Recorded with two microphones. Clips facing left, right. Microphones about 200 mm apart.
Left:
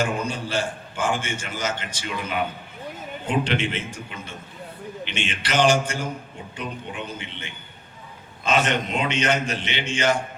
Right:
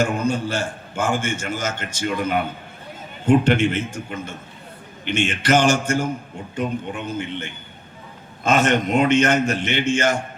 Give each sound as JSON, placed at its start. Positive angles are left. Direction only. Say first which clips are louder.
{"t": 0.0, "sound": "a man's voice", "louder": "right 5 dB", "side_deg": -45}